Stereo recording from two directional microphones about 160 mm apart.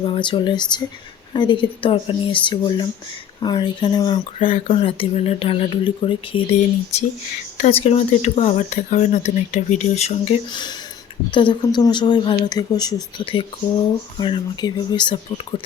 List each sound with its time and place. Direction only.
0.0 s speech: 30° left (ahead or behind)
7.7 s speech: 40° left (ahead or behind)
10.5 s speech: 25° left (ahead or behind)